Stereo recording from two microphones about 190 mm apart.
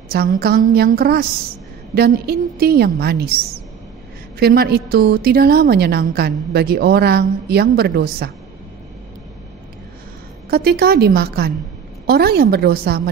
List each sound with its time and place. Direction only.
0.1 s a woman's voice: 55° right (ahead or behind)
4.4 s a woman's voice: 55° right (ahead or behind)
10.5 s a woman's voice: 55° right (ahead or behind)